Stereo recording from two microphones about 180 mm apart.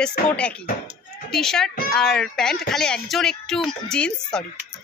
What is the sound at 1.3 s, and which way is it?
Speech, 5° left (ahead or behind).